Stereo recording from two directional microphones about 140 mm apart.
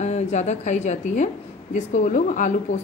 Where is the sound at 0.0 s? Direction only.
55° left (ahead or behind).